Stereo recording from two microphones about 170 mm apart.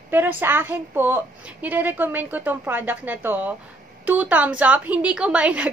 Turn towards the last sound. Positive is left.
turn(degrees=-10)  # may be behind; listen again after turning